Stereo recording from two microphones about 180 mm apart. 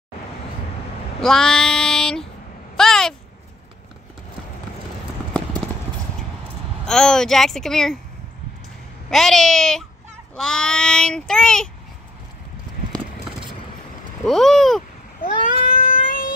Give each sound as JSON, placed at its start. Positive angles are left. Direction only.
{"t": 1.2, "sound": "child singing", "side_deg": 5}
{"t": 2.8, "sound": "a sound", "side_deg": 5}
{"t": 6.9, "sound": "a child's voice", "side_deg": 5}
{"t": 9.1, "sound": "a child's voice", "side_deg": 0}
{"t": 14.2, "sound": "a child's voice", "side_deg": 0}
{"t": 15.2, "sound": "a sound", "side_deg": 50}